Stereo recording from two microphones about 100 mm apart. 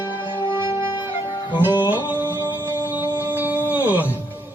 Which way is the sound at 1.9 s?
20° right (ahead or behind).